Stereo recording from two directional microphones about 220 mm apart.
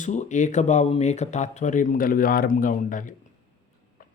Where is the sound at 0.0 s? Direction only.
35° left (ahead or behind).